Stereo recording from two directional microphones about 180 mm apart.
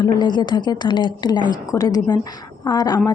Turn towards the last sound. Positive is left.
turn(degrees=20)  # may be behind; listen again after turning